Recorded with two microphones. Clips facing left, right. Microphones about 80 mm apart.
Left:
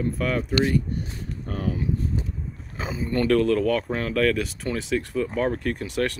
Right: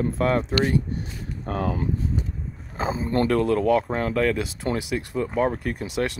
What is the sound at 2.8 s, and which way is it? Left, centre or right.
Speech, right.